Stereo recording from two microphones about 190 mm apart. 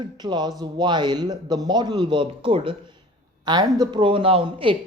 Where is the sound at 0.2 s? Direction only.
20° right (ahead or behind).